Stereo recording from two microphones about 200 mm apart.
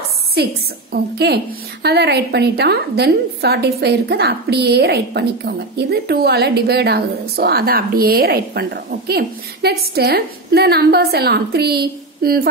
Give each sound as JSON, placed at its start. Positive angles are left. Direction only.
{"t": 0.4, "sound": "a woman's voice", "side_deg": -55}